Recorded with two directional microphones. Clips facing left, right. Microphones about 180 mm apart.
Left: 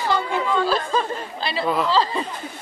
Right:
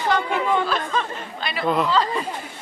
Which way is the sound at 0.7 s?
35° left (ahead or behind).